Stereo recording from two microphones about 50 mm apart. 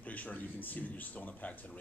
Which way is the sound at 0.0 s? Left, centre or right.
Left.